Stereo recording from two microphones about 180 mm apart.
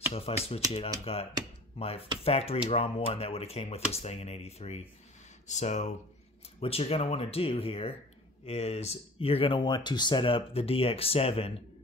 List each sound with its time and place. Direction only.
0.1 s speech: 35° left (ahead or behind)